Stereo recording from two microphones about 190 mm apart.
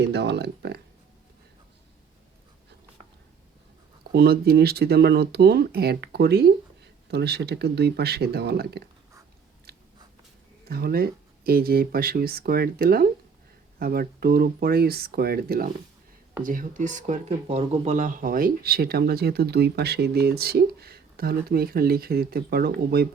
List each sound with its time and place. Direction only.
0.0 s speech: 60° right (ahead or behind)
4.1 s speech: 55° right (ahead or behind)
9.7 s biting: 55° right (ahead or behind)
10.7 s speech: 55° right (ahead or behind)